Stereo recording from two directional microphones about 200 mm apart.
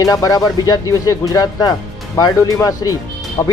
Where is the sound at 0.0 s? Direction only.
15° left (ahead or behind).